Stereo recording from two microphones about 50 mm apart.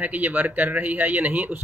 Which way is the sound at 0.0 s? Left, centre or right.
Right.